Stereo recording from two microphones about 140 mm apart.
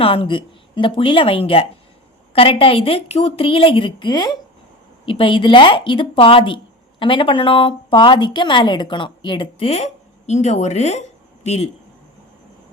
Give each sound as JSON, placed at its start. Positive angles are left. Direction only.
{"t": 0.0, "sound": "a woman's voice", "side_deg": 40}